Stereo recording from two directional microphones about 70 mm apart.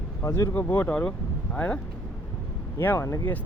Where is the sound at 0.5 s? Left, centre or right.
Left.